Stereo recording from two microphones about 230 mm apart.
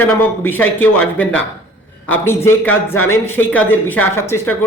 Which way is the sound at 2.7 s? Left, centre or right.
Left.